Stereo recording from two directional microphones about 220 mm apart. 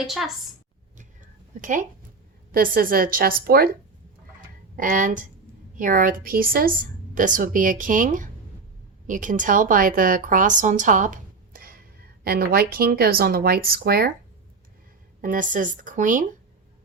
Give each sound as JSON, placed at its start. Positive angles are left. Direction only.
{"t": 0.0, "sound": "a woman's voice", "side_deg": 0}
{"t": 1.6, "sound": "a woman's voice", "side_deg": -35}
{"t": 4.4, "sound": "a sound", "side_deg": -35}
{"t": 5.7, "sound": "a woman's voice", "side_deg": -40}
{"t": 15.2, "sound": "a woman's voice", "side_deg": -35}